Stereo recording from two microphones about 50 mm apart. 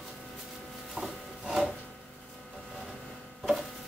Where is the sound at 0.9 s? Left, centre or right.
Centre.